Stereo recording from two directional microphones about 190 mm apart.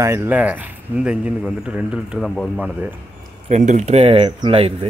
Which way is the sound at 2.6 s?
10° right (ahead or behind).